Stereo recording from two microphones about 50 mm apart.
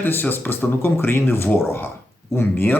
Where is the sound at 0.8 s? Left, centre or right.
Left.